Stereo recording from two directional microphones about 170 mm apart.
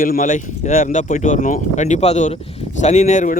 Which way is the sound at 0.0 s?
50° left (ahead or behind).